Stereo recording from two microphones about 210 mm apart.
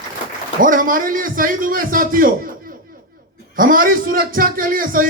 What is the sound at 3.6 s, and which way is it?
A man's voice, 40° right (ahead or behind).